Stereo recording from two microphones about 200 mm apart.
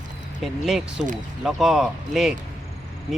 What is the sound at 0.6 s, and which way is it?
Speech, centre (ahead or behind).